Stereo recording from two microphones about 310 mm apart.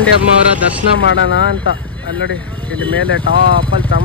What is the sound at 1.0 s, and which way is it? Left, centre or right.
Speech, left.